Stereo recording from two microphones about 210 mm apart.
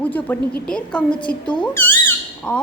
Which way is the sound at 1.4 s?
20° left (ahead or behind).